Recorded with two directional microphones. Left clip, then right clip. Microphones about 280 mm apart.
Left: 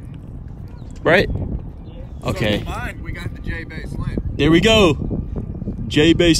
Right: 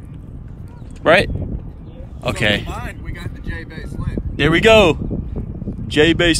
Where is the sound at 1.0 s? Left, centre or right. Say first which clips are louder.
Right 2 dB; left.